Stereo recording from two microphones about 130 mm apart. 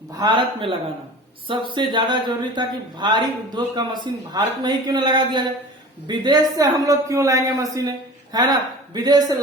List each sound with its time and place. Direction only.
0.2 s a man's voice: 40° right (ahead or behind)